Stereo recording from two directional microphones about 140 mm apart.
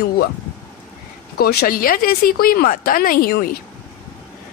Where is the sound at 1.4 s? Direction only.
90° left.